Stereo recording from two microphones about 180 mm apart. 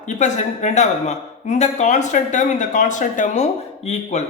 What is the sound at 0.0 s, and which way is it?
Speech, 40° left (ahead or behind).